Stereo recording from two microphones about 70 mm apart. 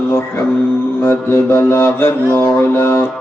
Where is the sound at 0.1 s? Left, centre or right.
Left.